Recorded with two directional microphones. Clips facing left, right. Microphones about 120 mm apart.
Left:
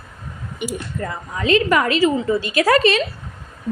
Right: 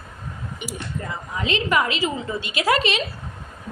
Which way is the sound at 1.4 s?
40° left (ahead or behind).